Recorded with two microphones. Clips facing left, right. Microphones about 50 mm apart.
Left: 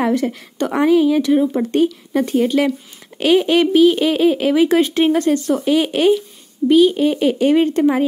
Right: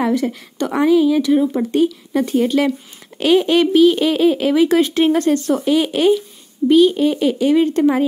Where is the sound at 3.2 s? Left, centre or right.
Centre.